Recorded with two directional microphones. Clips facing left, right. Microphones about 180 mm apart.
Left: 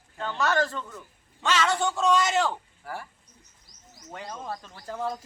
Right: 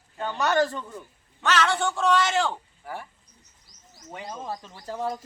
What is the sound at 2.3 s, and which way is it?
Speech, centre (ahead or behind).